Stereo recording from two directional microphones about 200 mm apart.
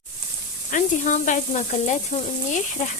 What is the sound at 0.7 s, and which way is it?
Speech, 40° left (ahead or behind).